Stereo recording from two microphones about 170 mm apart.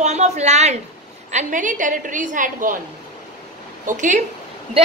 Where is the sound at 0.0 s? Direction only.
40° right (ahead or behind).